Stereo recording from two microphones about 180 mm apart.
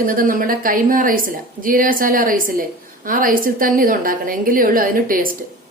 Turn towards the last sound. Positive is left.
turn(degrees=-50)  # may be behind; listen again after turning